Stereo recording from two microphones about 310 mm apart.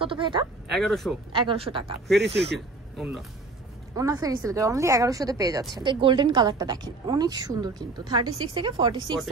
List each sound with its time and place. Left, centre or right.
0.0 s a woman's voice: centre
0.7 s speech: centre
1.3 s a woman's voice: centre
2.1 s speech: right
3.0 s speech: centre
3.9 s a woman's voice: centre